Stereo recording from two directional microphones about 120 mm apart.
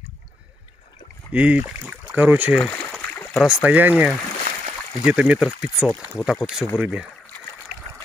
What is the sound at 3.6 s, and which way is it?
Speech, 15° right (ahead or behind).